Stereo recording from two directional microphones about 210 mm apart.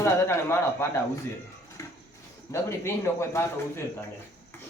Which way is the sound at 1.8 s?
15° left (ahead or behind).